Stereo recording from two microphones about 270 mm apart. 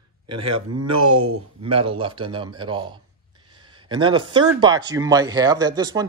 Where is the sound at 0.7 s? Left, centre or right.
Right.